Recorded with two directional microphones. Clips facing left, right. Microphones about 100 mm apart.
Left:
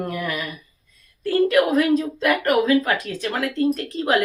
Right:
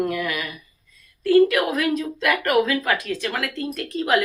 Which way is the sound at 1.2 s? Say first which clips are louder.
Right 4 dB; 35° left (ahead or behind).